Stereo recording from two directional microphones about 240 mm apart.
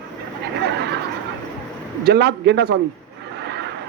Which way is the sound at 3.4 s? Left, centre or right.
Right.